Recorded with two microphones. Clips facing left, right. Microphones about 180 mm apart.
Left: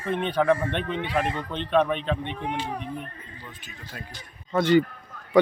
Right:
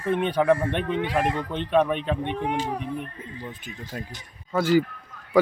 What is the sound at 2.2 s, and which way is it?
Speech, 50° right (ahead or behind).